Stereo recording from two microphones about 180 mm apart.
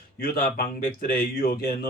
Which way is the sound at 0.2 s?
55° left (ahead or behind).